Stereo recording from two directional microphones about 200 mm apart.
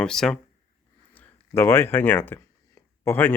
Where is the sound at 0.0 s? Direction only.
Centre (ahead or behind).